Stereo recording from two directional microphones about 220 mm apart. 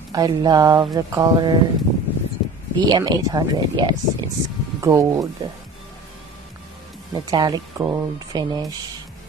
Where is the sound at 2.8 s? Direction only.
20° right (ahead or behind).